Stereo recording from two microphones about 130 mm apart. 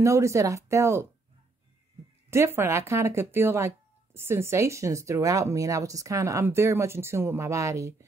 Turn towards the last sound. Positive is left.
turn(degrees=-25)  # may be behind; listen again after turning